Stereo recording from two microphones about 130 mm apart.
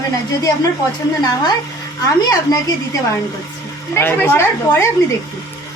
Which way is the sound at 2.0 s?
25° left (ahead or behind).